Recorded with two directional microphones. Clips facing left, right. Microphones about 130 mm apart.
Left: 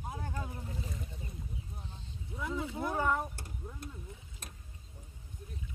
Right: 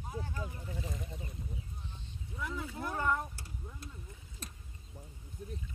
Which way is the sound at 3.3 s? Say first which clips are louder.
Left 3 dB; 50° left (ahead or behind).